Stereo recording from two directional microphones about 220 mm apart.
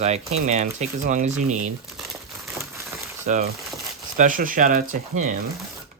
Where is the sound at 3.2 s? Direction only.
30° right (ahead or behind).